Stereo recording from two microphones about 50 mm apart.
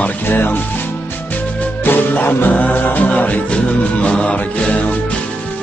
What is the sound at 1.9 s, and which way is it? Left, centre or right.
Music, left.